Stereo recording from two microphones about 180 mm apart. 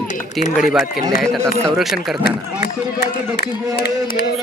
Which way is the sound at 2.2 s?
65° left (ahead or behind).